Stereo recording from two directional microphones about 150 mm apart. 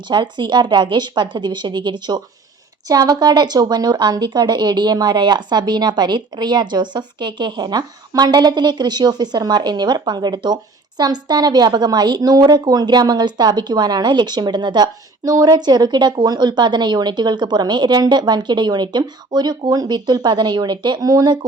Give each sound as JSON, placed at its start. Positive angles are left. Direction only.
{"t": 0.1, "sound": "a woman's voice", "side_deg": -30}